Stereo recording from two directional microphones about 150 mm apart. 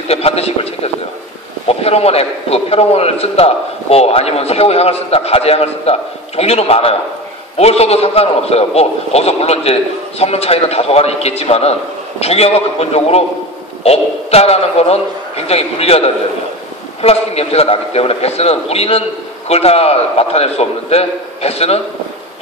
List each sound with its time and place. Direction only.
0.1 s a man's voice: 40° left (ahead or behind)
1.7 s a man's voice: 45° left (ahead or behind)
17.0 s a man's voice: 45° left (ahead or behind)